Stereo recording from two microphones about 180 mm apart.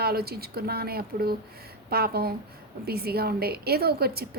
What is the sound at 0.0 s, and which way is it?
A woman's voice, 60° right (ahead or behind).